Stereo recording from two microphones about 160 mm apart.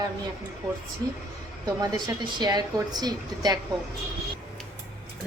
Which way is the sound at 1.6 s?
25° right (ahead or behind).